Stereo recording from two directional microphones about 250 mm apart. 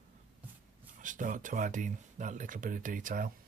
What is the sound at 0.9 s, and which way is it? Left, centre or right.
Speech, right.